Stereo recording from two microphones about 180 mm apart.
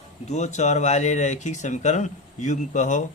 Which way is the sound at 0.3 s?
40° left (ahead or behind).